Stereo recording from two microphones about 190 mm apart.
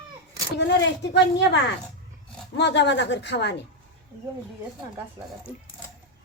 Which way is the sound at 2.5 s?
65° left (ahead or behind).